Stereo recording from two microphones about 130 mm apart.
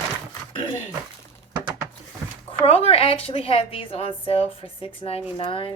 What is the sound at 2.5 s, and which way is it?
A woman's voice, 50° left (ahead or behind).